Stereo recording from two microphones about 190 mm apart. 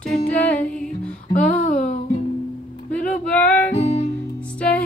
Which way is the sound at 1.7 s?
45° left (ahead or behind).